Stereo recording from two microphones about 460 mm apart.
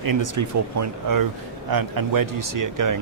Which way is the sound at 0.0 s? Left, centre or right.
Right.